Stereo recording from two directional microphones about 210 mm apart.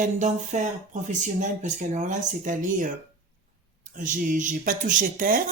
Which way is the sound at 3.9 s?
40° right (ahead or behind).